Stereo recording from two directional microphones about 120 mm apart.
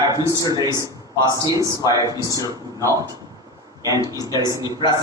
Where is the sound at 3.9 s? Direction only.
30° right (ahead or behind).